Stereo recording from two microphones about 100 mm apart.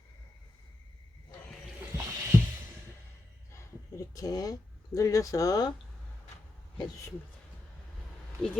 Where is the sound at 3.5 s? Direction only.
30° left (ahead or behind).